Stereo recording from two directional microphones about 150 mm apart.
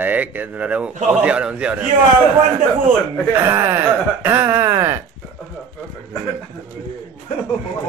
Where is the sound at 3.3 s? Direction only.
15° right (ahead or behind).